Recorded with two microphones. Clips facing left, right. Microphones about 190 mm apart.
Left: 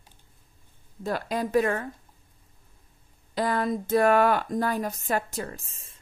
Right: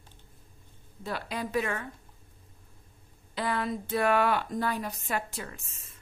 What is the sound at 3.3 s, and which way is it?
Speech, 40° left (ahead or behind).